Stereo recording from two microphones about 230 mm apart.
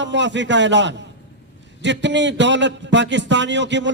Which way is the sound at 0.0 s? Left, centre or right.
Right.